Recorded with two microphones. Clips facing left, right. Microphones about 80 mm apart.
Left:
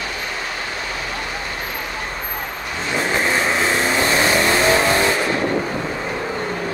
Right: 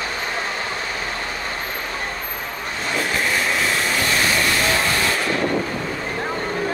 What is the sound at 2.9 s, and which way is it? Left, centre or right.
Vehicle, left.